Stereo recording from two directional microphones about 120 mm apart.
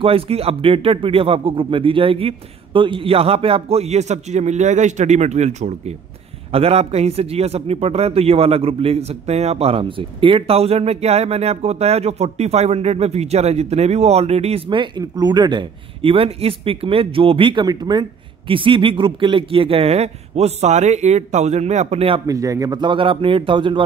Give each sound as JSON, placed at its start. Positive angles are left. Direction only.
{"t": 0.0, "sound": "speech", "side_deg": -55}
{"t": 6.5, "sound": "a man's voice", "side_deg": -60}
{"t": 22.2, "sound": "speech", "side_deg": -25}